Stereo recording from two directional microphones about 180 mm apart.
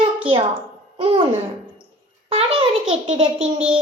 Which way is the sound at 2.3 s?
30° right (ahead or behind).